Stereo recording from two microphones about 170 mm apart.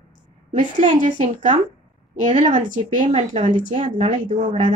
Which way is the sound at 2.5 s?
50° right (ahead or behind).